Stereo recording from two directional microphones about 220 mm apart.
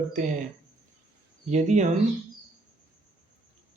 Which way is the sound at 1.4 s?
30° right (ahead or behind).